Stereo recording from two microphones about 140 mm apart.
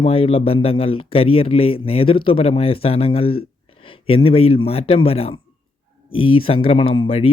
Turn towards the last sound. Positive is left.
turn(degrees=45)  # may be behind; listen again after turning